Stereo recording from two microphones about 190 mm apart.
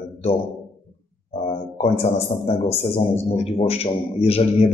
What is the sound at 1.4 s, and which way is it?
A man's voice, 30° left (ahead or behind).